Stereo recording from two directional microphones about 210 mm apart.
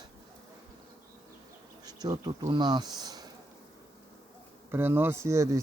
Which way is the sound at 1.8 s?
20° right (ahead or behind).